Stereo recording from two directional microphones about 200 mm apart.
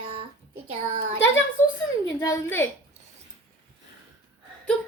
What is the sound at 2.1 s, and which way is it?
Speech, 15° left (ahead or behind).